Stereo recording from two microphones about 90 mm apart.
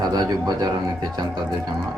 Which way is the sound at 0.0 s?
50° right (ahead or behind).